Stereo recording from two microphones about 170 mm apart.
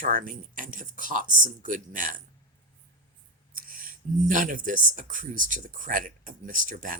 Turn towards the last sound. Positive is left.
turn(degrees=-50)  # may be behind; listen again after turning